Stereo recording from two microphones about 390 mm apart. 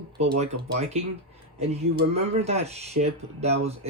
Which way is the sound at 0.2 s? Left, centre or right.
Centre.